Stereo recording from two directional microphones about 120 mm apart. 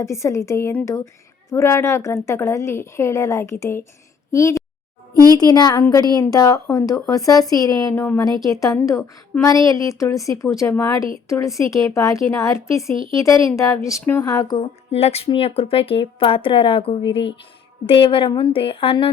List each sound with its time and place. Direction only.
0.0 s a woman's voice: 25° left (ahead or behind)
5.1 s a sound: 30° right (ahead or behind)
5.4 s a woman's voice: 35° left (ahead or behind); by 14.3 s 15° left (ahead or behind)
14.3 s a woman's voice: 30° left (ahead or behind)
14.8 s speech: 55° left (ahead or behind)